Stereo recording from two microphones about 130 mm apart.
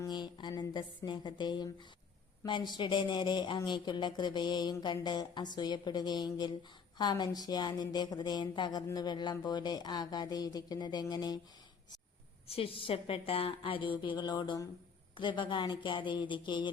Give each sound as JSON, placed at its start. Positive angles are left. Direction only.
{"t": 0.0, "sound": "a woman's voice", "side_deg": 35}
{"t": 12.5, "sound": "a woman's voice", "side_deg": 45}